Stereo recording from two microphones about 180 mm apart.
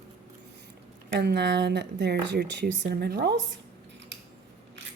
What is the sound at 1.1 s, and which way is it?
A woman's voice, 70° right (ahead or behind).